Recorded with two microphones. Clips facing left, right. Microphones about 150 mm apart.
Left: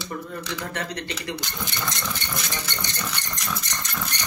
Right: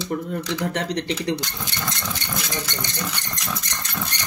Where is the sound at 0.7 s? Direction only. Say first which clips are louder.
Right 6 dB; 90° right.